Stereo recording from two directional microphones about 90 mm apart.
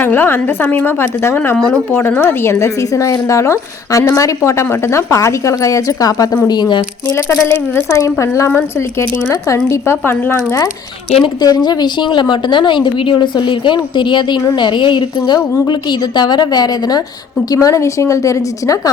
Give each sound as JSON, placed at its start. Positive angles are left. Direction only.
{"t": 0.0, "sound": "a woman's voice", "side_deg": 25}
{"t": 6.5, "sound": "a woman's voice", "side_deg": 55}
{"t": 7.4, "sound": "a woman's voice", "side_deg": 25}
{"t": 11.2, "sound": "a woman's voice", "side_deg": 50}